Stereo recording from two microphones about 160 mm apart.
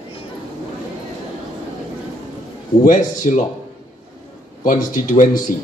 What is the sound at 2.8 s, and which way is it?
Speech, 55° left (ahead or behind).